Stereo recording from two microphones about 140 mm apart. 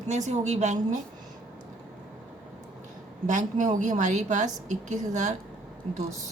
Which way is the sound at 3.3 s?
65° right (ahead or behind).